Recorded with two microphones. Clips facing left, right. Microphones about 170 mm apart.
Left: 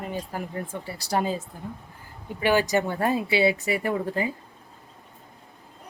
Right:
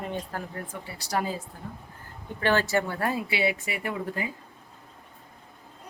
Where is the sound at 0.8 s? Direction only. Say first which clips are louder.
Left 3 dB; 30° left (ahead or behind).